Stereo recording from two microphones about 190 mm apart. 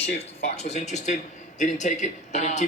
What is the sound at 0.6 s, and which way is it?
A man's voice, 35° left (ahead or behind).